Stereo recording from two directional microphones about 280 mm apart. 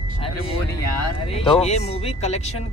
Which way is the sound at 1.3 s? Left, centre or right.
Left.